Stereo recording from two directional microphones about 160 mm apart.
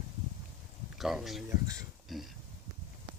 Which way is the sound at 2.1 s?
Centre (ahead or behind).